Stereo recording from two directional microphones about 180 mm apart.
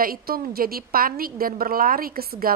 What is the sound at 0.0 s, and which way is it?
A woman's voice, 55° right (ahead or behind).